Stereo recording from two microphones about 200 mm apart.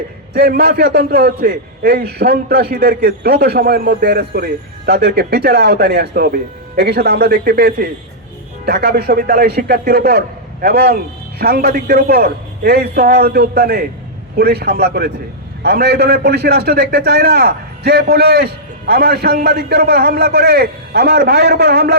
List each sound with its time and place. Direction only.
0.3 s a man's voice: 50° right (ahead or behind)